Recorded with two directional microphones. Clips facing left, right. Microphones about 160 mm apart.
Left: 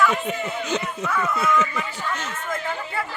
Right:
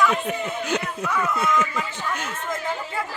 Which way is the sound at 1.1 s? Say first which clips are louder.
Left 1 dB; 20° right (ahead or behind).